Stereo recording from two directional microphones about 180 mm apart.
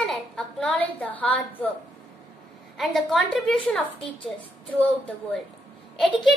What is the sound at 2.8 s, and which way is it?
A woman's voice, centre (ahead or behind).